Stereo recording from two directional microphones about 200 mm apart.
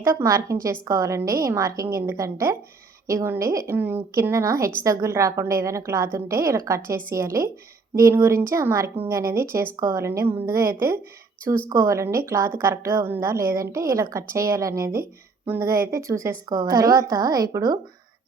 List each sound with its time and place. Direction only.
0.0 s a woman's voice: 15° right (ahead or behind)